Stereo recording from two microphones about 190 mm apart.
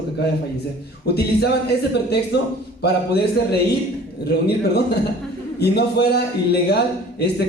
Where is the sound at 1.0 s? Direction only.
60° left (ahead or behind).